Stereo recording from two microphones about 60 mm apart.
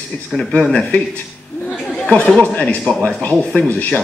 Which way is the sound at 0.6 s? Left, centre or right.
Centre.